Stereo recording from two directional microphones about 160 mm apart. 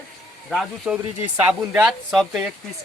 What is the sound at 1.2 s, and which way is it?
Speech, 10° right (ahead or behind).